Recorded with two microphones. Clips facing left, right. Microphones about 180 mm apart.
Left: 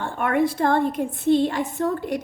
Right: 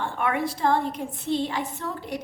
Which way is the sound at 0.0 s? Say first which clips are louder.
Left 5 dB; 50° left (ahead or behind).